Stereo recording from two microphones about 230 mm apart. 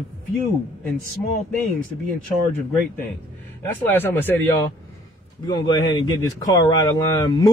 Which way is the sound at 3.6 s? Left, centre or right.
Centre.